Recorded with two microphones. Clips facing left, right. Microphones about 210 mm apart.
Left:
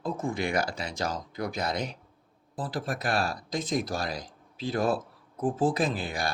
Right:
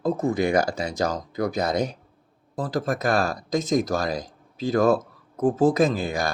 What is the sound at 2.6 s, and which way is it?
Speech, 45° right (ahead or behind).